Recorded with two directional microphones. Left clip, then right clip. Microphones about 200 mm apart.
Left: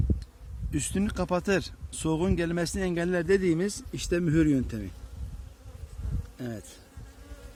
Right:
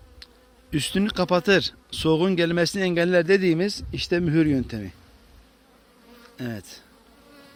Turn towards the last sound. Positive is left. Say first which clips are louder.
# right 4 dB
turn(degrees=-30)  # may be behind; listen again after turning